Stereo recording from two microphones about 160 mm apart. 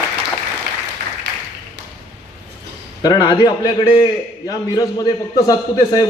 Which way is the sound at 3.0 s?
25° left (ahead or behind).